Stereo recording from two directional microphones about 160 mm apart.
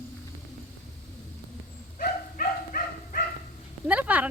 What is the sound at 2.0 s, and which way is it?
Bow-wow, 60° left (ahead or behind).